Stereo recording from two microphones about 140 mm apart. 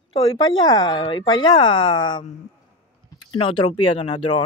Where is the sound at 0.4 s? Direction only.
30° left (ahead or behind).